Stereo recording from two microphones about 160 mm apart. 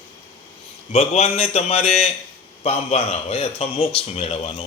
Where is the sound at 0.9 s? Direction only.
40° left (ahead or behind).